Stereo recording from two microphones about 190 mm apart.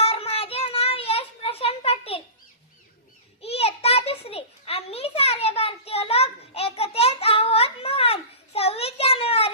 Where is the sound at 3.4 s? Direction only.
30° left (ahead or behind).